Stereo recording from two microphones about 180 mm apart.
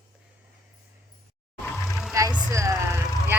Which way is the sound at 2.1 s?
15° right (ahead or behind).